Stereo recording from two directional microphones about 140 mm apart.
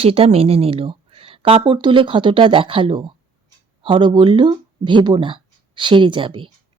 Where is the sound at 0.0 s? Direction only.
45° right (ahead or behind).